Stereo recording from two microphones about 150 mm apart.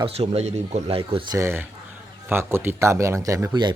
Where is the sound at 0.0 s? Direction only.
45° right (ahead or behind).